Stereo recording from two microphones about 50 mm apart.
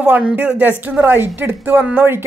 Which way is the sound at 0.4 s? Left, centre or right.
Right.